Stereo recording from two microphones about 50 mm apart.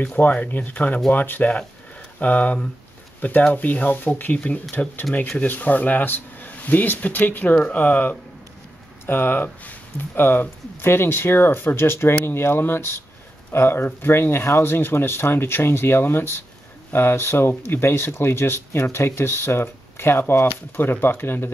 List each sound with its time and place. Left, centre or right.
0.0 s speech: left